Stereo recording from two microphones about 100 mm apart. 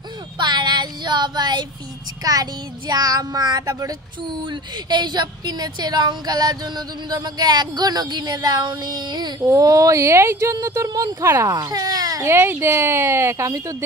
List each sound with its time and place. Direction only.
0.4 s child singing: 45° right (ahead or behind)
2.2 s speech: 35° right (ahead or behind)
9.4 s speech: 35° right (ahead or behind)
11.5 s speech: 40° right (ahead or behind)
12.3 s a woman's voice: 25° right (ahead or behind)